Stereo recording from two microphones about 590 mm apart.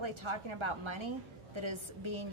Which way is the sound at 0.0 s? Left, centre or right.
Right.